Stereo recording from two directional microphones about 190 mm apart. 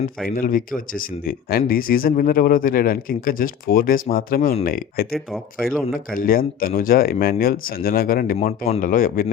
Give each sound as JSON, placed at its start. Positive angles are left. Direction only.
{"t": 0.3, "sound": "speech", "side_deg": 50}
{"t": 4.4, "sound": "speech", "side_deg": 35}
{"t": 4.6, "sound": "speech", "side_deg": 50}
{"t": 5.1, "sound": "speech", "side_deg": 0}
{"t": 5.9, "sound": "speech", "side_deg": 50}